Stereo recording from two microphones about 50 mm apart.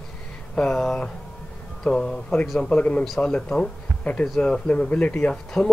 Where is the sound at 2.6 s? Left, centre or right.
Left.